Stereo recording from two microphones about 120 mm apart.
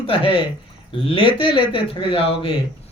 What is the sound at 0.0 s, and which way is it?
Speech, 50° left (ahead or behind).